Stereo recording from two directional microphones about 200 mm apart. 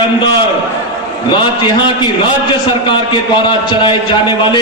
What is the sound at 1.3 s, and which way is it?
A man's voice, 25° left (ahead or behind).